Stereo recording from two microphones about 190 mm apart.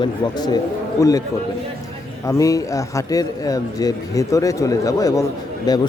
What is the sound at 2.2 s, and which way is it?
Speech, 15° left (ahead or behind).